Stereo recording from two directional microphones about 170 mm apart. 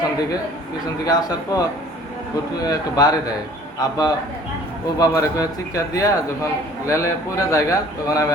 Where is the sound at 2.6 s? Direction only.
20° left (ahead or behind).